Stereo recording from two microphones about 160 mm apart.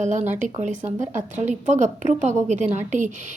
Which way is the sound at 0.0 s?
50° right (ahead or behind).